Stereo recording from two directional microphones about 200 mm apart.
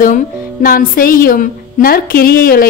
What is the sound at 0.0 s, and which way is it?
A woman's voice, 45° left (ahead or behind).